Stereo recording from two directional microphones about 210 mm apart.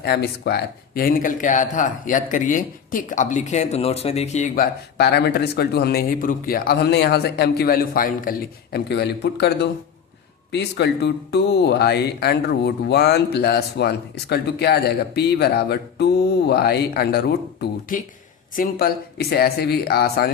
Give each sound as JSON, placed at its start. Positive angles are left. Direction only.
{"t": 0.0, "sound": "speech", "side_deg": 50}